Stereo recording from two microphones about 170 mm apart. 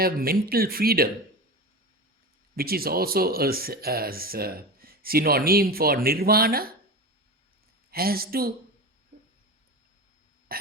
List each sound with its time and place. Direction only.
0.0 s speech: 60° right (ahead or behind)
2.6 s speech: 60° right (ahead or behind)
7.9 s speech: 60° right (ahead or behind)
10.5 s burping: 60° right (ahead or behind)